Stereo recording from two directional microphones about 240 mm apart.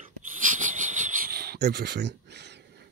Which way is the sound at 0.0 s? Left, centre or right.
Right.